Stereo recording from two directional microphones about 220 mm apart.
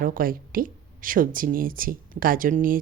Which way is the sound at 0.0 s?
40° right (ahead or behind).